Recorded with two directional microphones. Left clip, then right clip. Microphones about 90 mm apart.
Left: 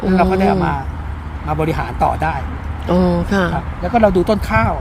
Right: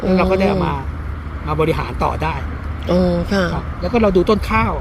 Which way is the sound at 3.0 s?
90° left.